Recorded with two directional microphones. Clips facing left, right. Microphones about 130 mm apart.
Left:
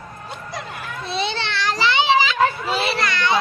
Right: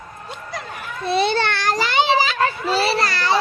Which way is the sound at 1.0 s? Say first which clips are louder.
Right 7 dB; 55° right (ahead or behind).